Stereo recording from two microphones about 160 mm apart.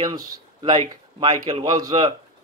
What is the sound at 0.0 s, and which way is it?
Speech, 25° right (ahead or behind).